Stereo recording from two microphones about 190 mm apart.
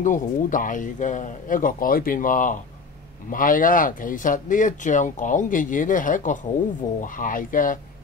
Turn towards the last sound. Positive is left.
turn(degrees=45)  # may be behind; listen again after turning